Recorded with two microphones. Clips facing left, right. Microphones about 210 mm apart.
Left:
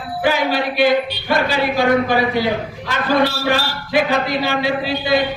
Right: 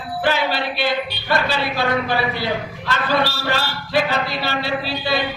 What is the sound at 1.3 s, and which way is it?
A man's voice, 15° left (ahead or behind).